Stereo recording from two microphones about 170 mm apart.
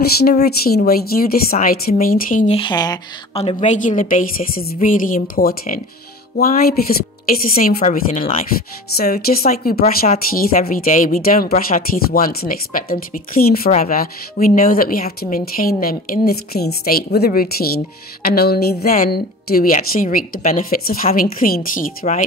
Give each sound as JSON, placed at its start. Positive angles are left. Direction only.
{"t": 0.5, "sound": "a woman's voice", "side_deg": 65}
{"t": 2.5, "sound": "speech", "side_deg": 25}
{"t": 3.3, "sound": "a woman's voice", "side_deg": 40}
{"t": 8.9, "sound": "a woman's voice", "side_deg": 60}
{"t": 13.7, "sound": "a woman's voice", "side_deg": 50}